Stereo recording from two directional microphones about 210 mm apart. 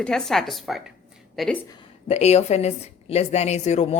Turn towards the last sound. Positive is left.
turn(degrees=30)  # may be behind; listen again after turning